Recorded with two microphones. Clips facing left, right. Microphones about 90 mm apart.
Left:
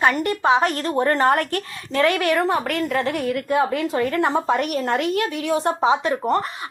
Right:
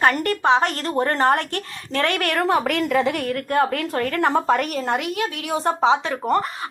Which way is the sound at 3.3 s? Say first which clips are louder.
Left 1 dB; 55° right (ahead or behind).